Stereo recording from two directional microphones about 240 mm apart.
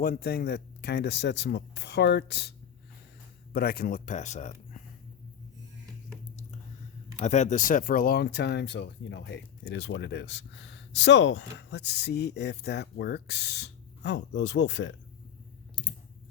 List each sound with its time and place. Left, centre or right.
0.0 s speech: left
7.2 s speech: left